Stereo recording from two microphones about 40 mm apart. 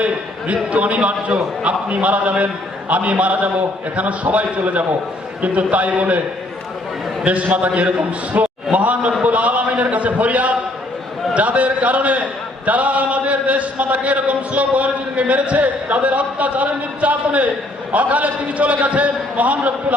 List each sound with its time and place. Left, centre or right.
0.0 s a man's voice: right
7.3 s a man's voice: right